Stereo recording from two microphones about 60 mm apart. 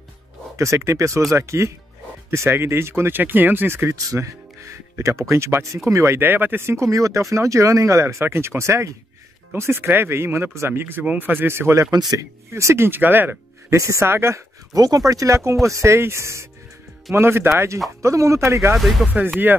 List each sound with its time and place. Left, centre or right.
0.6 s speech: right
3.9 s speech: right
6.1 s speech: right
6.9 s speech: right
10.7 s speech: right
13.7 s speech: right
14.1 s speech: right
14.7 s speech: right
18.8 s speech: centre
19.2 s speech: right